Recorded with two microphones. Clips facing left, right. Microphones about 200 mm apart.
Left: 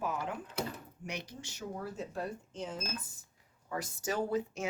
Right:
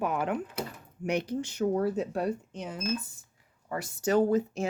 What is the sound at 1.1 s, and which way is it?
Speech, 60° right (ahead or behind).